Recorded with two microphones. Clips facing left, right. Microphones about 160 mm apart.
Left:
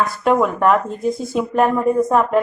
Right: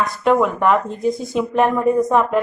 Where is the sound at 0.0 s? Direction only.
Centre (ahead or behind).